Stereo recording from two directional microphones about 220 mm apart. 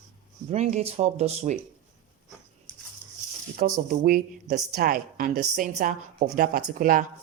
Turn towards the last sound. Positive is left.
turn(degrees=-40)  # may be behind; listen again after turning